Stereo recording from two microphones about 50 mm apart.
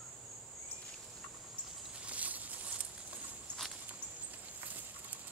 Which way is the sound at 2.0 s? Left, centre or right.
Right.